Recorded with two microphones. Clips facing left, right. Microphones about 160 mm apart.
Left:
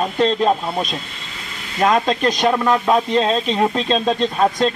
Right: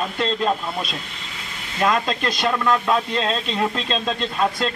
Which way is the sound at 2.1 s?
30° left (ahead or behind).